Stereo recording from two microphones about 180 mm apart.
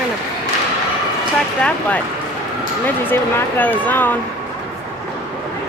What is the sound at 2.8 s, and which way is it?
Speech, 10° left (ahead or behind).